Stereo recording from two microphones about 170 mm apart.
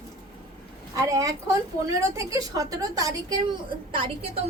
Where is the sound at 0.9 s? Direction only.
20° right (ahead or behind).